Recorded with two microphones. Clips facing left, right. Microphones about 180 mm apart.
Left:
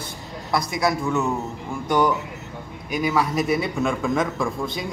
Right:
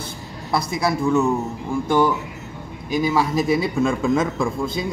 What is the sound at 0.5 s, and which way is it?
Speech, 25° right (ahead or behind).